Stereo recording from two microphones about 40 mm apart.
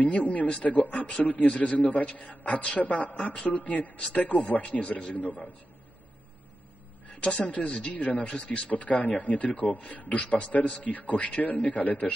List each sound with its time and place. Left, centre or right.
0.0 s a man's voice: left
5.1 s a man's voice: left
7.2 s speech: left